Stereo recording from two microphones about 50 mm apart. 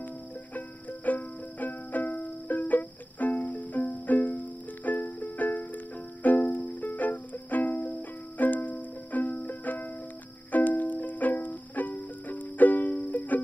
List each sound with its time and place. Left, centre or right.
0.6 s music: left